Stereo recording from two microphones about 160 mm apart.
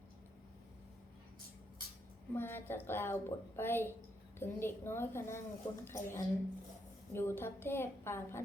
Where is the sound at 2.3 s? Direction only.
15° left (ahead or behind).